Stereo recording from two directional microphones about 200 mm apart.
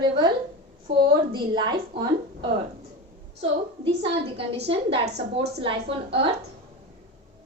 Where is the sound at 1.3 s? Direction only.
25° right (ahead or behind).